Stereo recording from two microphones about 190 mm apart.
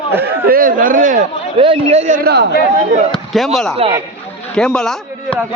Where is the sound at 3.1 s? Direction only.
Centre (ahead or behind).